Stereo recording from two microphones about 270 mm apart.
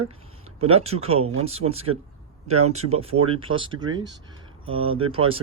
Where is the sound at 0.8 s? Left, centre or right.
Right.